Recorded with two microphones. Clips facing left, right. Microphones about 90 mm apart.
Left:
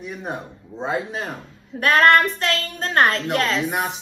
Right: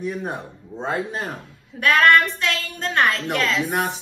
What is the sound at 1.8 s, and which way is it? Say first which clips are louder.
A woman's voice: left 1 dB; 40° left (ahead or behind).